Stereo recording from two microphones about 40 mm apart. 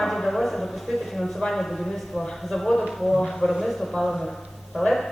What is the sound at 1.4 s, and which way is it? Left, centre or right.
Speech, centre.